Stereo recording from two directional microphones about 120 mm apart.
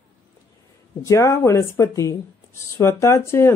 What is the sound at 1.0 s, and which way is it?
Speech, 25° left (ahead or behind).